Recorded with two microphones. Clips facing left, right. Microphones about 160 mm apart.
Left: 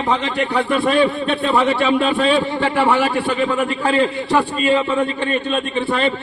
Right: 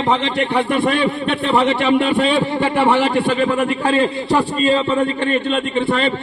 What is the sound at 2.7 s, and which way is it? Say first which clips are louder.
Speech: right 2 dB; 25° right (ahead or behind).